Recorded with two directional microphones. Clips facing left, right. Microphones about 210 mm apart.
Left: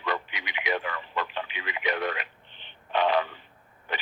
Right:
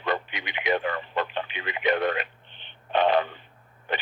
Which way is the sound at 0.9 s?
55° right (ahead or behind).